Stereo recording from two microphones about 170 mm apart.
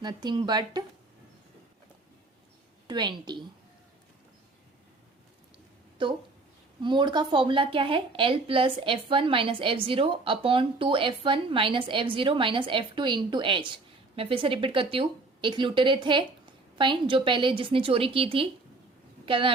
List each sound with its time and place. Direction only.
0.0 s speech: 25° right (ahead or behind)
2.8 s a woman's voice: 25° right (ahead or behind)
6.0 s a woman's voice: 30° right (ahead or behind)